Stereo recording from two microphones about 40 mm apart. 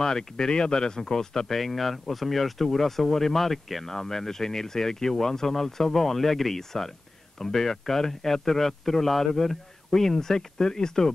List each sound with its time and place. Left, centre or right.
0.0 s speech: centre
1.6 s speech: centre